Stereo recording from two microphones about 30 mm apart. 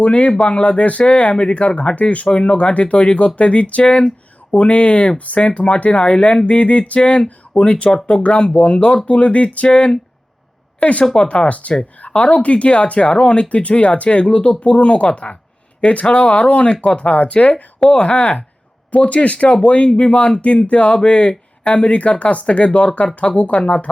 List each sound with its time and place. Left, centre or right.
0.0 s speech: left
2.2 s speech: left
5.1 s speech: left
5.4 s speech: left
7.6 s speech: left
11.0 s speech: left
11.3 s speech: left
17.9 s speech: left